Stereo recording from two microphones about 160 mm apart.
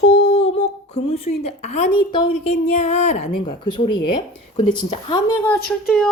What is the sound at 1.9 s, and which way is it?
Speech, 30° left (ahead or behind).